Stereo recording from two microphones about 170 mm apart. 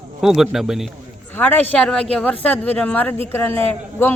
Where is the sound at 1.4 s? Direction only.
10° left (ahead or behind).